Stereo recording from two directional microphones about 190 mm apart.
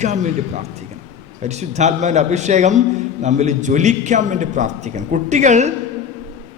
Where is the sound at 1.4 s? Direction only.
35° right (ahead or behind).